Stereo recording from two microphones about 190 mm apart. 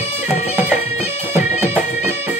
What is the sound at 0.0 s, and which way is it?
Music, 35° left (ahead or behind).